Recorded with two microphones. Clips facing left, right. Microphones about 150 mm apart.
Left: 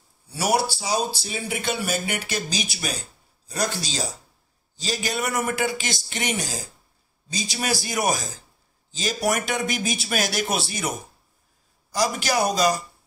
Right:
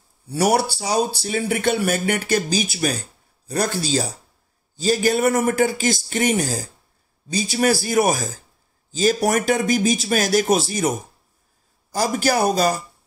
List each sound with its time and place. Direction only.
0.3 s speech: 55° right (ahead or behind)